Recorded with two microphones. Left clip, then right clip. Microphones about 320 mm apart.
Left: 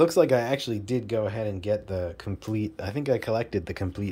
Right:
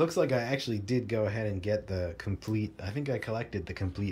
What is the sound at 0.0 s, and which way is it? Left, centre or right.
Speech, centre.